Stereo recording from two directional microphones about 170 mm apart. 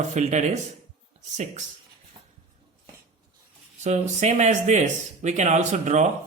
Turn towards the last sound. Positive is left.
turn(degrees=-45)  # may be behind; listen again after turning